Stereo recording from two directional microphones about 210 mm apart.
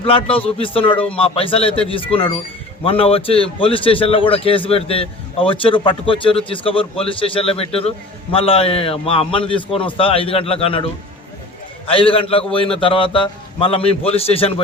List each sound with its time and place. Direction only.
0.0 s a man's voice: 25° left (ahead or behind)
11.9 s a man's voice: 25° left (ahead or behind)